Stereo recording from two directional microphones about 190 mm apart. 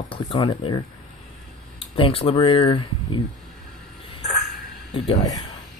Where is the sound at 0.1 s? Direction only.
25° left (ahead or behind).